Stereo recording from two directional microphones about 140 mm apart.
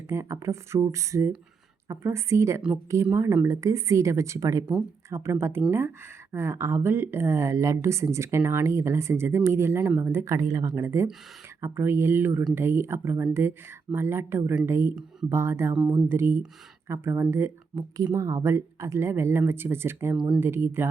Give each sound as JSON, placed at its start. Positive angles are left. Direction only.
{"t": 0.1, "sound": "speech", "side_deg": -20}